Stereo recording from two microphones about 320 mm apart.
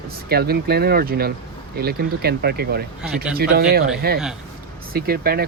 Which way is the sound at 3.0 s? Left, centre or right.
Centre.